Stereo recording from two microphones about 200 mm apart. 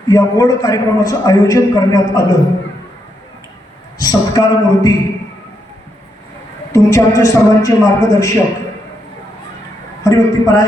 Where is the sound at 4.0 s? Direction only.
20° left (ahead or behind).